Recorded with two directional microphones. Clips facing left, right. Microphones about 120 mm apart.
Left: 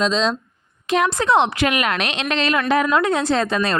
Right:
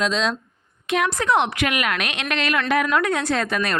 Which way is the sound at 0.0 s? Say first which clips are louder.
Left 3 dB; 25° left (ahead or behind).